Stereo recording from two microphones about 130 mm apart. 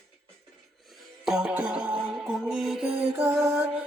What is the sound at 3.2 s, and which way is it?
Music, 20° right (ahead or behind).